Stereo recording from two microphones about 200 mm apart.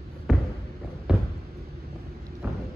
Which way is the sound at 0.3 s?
Centre (ahead or behind).